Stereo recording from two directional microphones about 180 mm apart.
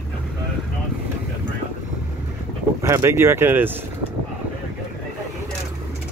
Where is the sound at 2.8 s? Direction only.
15° right (ahead or behind).